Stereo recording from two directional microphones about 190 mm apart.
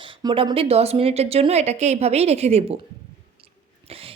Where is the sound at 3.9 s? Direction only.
30° right (ahead or behind).